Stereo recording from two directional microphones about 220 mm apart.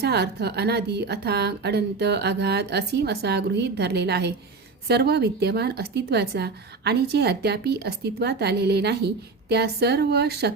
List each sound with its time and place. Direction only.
0.0 s speech: 45° right (ahead or behind)